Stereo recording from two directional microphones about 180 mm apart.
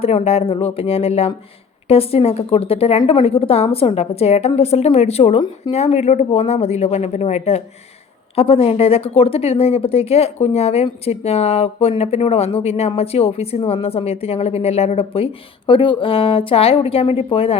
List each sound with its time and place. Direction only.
0.0 s speech: 35° left (ahead or behind)